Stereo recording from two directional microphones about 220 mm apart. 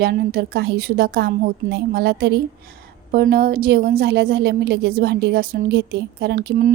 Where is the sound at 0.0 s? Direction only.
45° right (ahead or behind).